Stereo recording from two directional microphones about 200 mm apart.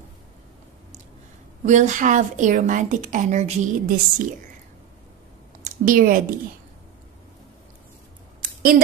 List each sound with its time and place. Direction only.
1.6 s a woman's voice: 40° right (ahead or behind)
5.6 s speech: 45° right (ahead or behind)